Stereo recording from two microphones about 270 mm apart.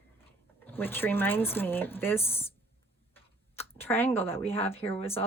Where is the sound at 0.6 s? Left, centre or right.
Centre.